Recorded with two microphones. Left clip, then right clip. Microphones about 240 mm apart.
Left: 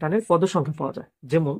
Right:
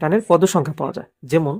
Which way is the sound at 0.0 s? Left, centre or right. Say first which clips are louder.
Right 5 dB; right.